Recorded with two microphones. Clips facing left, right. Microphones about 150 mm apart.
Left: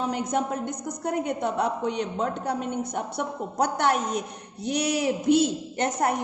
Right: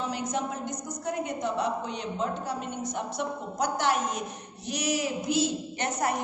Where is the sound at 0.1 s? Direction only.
55° left (ahead or behind).